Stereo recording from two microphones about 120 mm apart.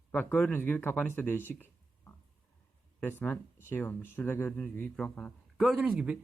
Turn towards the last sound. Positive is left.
turn(degrees=-10)  # may be behind; listen again after turning